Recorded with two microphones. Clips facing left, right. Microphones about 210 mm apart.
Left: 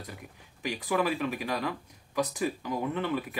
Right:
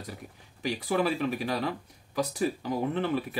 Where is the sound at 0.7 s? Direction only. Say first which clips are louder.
Right 1 dB; 40° right (ahead or behind).